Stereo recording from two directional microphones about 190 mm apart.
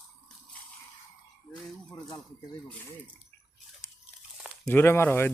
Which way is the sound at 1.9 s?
20° left (ahead or behind).